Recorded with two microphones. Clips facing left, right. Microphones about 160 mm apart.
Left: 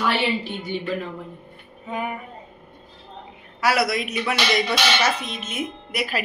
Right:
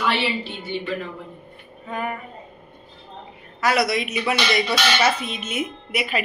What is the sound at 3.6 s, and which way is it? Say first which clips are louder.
Speech: right 1 dB; 5° left (ahead or behind).